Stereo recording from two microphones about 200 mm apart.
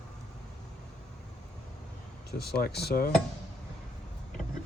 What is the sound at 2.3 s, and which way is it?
Speech, 50° left (ahead or behind).